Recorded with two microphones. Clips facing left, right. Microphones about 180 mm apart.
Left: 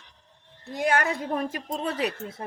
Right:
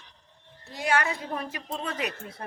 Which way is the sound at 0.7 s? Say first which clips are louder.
Left 2 dB; 50° left (ahead or behind).